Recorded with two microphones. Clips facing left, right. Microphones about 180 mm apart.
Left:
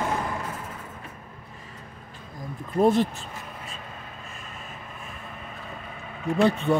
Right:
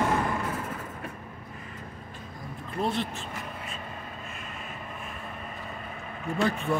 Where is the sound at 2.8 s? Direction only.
45° left (ahead or behind).